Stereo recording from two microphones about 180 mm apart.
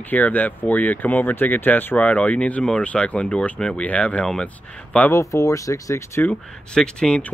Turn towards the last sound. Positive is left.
turn(degrees=5)  # may be behind; listen again after turning